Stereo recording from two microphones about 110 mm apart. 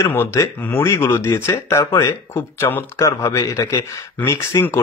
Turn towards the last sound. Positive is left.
turn(degrees=25)  # may be behind; listen again after turning